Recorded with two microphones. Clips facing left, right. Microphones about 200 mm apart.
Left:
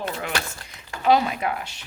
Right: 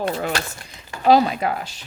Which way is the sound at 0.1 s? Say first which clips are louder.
Right 4 dB; 35° right (ahead or behind).